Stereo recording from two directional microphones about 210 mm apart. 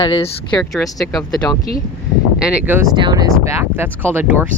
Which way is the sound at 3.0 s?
20° right (ahead or behind).